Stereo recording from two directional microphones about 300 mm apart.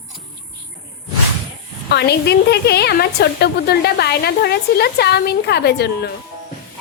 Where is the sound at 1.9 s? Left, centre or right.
Left.